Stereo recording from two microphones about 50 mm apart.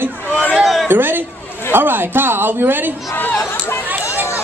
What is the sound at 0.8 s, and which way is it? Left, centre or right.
A woman's voice, right.